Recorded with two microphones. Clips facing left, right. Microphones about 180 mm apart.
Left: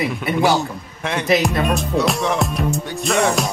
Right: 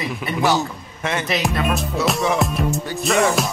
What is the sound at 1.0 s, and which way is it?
Music, centre (ahead or behind).